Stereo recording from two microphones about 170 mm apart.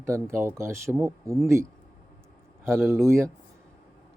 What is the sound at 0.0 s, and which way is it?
Speech, 15° right (ahead or behind).